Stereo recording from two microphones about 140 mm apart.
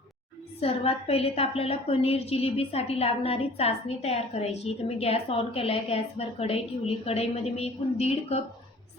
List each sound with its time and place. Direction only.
0.6 s a woman's voice: 45° left (ahead or behind)